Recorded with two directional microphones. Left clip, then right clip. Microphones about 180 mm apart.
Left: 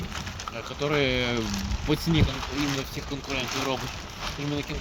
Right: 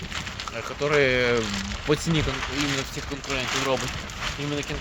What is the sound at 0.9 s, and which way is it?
Speech, 55° right (ahead or behind).